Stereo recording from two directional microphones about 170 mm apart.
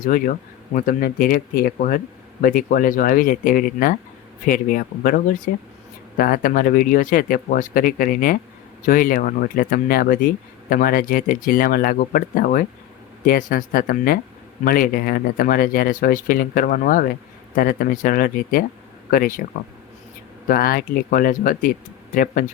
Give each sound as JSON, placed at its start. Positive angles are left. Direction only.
{"t": 0.0, "sound": "speech", "side_deg": 50}
{"t": 20.5, "sound": "speech", "side_deg": 60}